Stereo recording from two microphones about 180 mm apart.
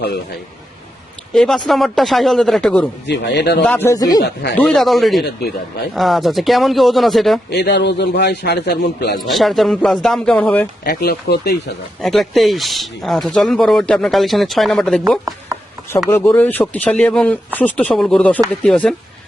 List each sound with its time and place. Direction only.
1.3 s speech: centre (ahead or behind)
3.1 s a man's voice: 70° left (ahead or behind)
3.6 s speech: 10° left (ahead or behind)
4.5 s speech: 5° left (ahead or behind)
5.2 s speech: 60° left (ahead or behind)
5.9 s speech: centre (ahead or behind)
7.5 s a man's voice: 65° left (ahead or behind)
9.3 s speech: centre (ahead or behind)
10.8 s speech: 60° left (ahead or behind)
12.0 s speech: centre (ahead or behind)